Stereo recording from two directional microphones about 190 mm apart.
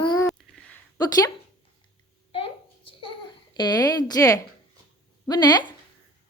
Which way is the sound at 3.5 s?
20° left (ahead or behind).